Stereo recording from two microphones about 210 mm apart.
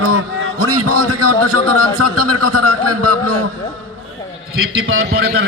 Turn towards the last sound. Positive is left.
turn(degrees=-45)  # may be behind; listen again after turning